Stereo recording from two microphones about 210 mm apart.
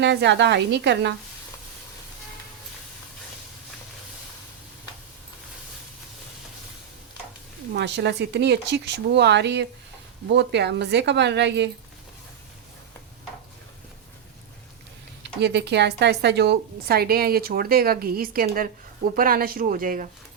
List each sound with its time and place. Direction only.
0.0 s speech: 55° right (ahead or behind)
7.7 s speech: 55° right (ahead or behind)
15.2 s speech: 55° right (ahead or behind)